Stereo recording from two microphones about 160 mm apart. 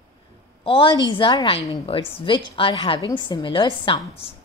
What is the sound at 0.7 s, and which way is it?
A woman's voice, 30° left (ahead or behind).